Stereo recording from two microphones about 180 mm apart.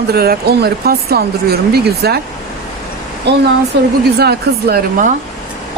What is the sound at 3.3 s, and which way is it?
Speech, 70° right (ahead or behind).